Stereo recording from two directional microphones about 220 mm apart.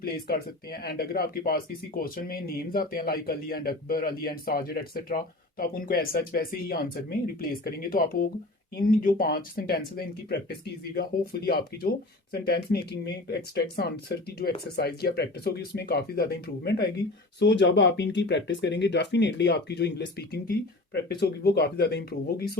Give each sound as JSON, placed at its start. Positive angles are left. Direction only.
{"t": 0.0, "sound": "speech", "side_deg": 45}